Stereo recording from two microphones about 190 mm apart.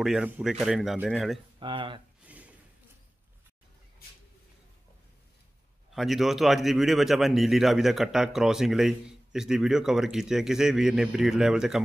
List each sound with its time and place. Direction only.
0.0 s speech: 5° right (ahead or behind)
1.6 s speech: 25° right (ahead or behind)
2.2 s wood: 5° right (ahead or behind)
5.9 s speech: centre (ahead or behind)